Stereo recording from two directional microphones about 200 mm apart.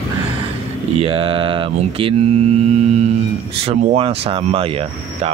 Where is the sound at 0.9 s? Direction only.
30° right (ahead or behind).